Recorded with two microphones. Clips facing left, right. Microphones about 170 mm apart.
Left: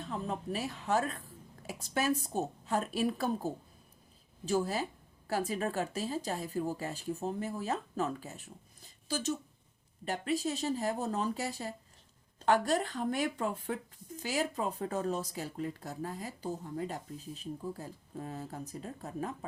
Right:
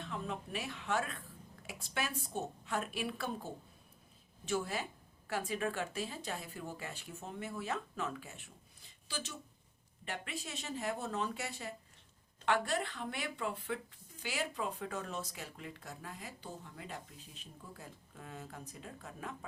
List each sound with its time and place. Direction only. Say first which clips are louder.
0.0 s speech: left 4 dB; 35° left (ahead or behind)